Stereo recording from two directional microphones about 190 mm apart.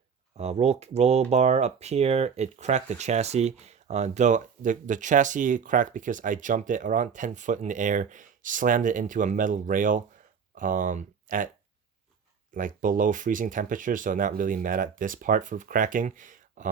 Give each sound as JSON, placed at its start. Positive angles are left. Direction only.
{"t": 0.3, "sound": "speech", "side_deg": -35}
{"t": 12.5, "sound": "speech", "side_deg": -45}